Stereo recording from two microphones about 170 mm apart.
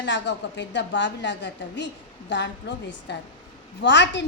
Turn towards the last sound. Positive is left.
turn(degrees=90)